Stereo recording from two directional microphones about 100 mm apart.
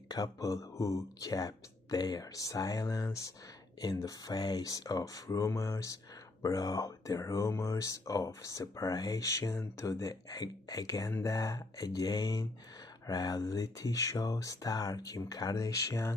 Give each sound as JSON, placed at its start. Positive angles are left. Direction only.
{"t": 0.1, "sound": "speech", "side_deg": 35}